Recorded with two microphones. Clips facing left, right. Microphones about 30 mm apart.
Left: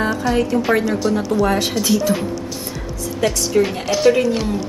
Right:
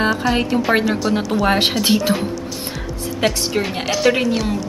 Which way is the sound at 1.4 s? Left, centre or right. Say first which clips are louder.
Right 4 dB; right.